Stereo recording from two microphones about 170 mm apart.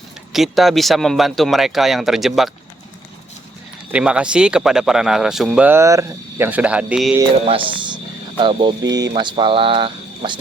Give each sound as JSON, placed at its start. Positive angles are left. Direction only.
{"t": 0.3, "sound": "speech", "side_deg": 0}
{"t": 3.9, "sound": "speech", "side_deg": -5}
{"t": 7.4, "sound": "a sound", "side_deg": -30}
{"t": 8.8, "sound": "speech", "side_deg": -90}
{"t": 9.1, "sound": "speech", "side_deg": -30}